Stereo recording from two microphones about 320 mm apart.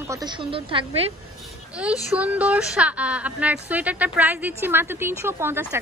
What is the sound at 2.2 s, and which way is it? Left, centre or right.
A woman's voice, centre.